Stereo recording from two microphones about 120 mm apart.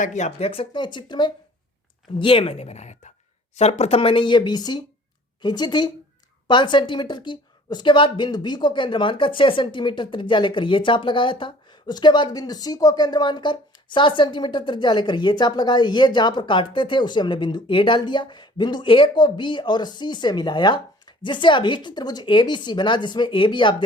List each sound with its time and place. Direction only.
0.0 s a woman's voice: 75° left (ahead or behind); by 23.7 s 40° left (ahead or behind)